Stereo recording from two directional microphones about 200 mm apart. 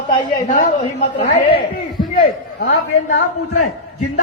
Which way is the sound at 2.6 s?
75° left (ahead or behind).